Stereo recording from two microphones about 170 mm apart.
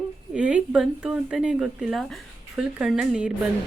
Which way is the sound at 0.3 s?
5° right (ahead or behind).